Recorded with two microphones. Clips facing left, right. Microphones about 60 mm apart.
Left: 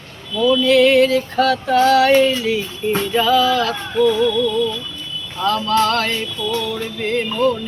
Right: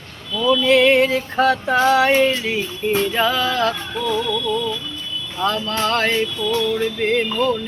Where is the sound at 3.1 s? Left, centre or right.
Right.